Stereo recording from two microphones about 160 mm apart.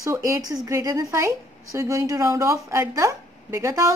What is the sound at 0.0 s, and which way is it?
Speech, 20° right (ahead or behind).